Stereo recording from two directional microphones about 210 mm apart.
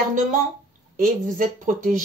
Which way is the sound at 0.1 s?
40° right (ahead or behind).